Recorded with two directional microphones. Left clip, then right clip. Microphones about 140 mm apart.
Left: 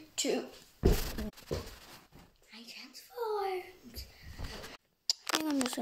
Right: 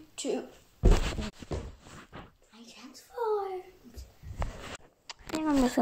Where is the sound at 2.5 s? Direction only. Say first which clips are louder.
Left 2 dB; 20° left (ahead or behind).